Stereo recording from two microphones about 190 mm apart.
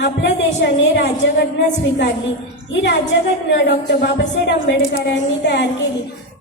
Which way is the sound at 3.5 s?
65° left (ahead or behind).